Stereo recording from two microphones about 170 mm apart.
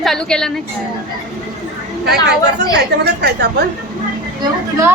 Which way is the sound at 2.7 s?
75° right (ahead or behind).